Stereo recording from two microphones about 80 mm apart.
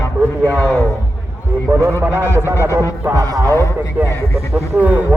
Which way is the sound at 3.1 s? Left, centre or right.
Right.